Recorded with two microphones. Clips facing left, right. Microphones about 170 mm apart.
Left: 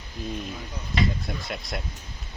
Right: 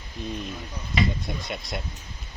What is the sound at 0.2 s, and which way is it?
Speech, centre (ahead or behind).